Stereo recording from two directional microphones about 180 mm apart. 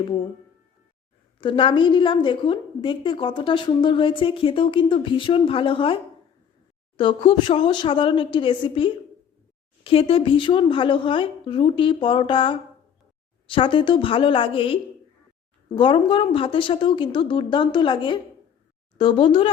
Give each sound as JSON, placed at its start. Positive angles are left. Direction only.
{"t": 1.4, "sound": "a woman's voice", "side_deg": 30}